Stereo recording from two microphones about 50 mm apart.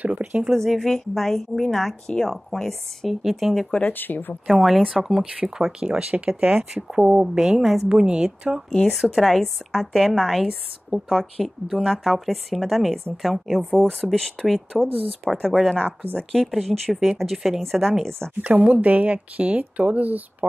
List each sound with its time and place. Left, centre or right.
0.0 s speech: right
0.5 s speech: centre
3.2 s speech: centre
3.8 s speech: left
4.5 s speech: centre
5.7 s a woman's voice: centre
5.9 s speech: right
6.7 s speech: centre
7.9 s a woman's voice: centre
14.1 s speech: centre
14.7 s speech: centre
18.6 s speech: right